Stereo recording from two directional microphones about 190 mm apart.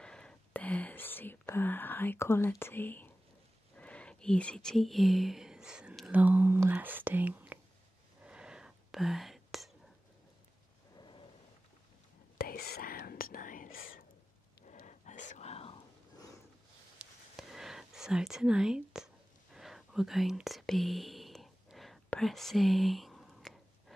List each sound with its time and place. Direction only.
0.0 s whispering: 5° left (ahead or behind)
3.7 s speech: 5° left (ahead or behind); by 7.5 s 10° right (ahead or behind)
8.2 s whispering: 5° right (ahead or behind)
11.0 s a sound: 25° left (ahead or behind)
12.4 s whispering: 55° left (ahead or behind)
14.7 s a sound: 40° left (ahead or behind)
17.0 s whispering: centre (ahead or behind)